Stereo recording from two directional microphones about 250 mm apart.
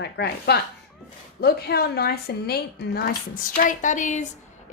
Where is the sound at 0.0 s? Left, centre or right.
Left.